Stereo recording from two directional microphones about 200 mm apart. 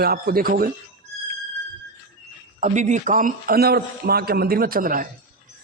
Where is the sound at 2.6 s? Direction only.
40° right (ahead or behind).